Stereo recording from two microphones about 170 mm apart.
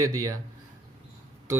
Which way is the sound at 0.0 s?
20° right (ahead or behind).